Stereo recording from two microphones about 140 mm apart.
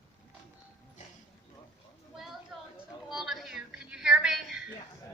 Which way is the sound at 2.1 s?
Centre (ahead or behind).